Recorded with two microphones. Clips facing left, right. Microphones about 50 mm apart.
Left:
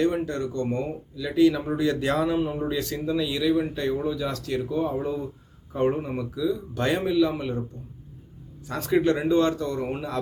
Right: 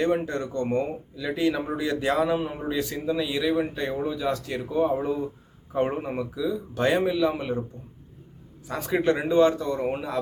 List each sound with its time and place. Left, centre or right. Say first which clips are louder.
0.0 s speech: even; right
1.7 s a man's voice: left 1 dB; centre
8.6 s a man's voice: left 1 dB; centre